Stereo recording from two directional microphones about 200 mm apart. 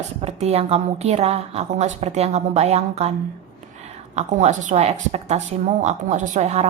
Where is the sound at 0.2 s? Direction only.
30° right (ahead or behind).